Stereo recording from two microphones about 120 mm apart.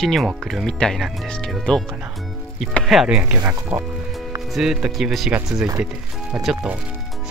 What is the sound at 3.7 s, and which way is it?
Speech, 25° right (ahead or behind).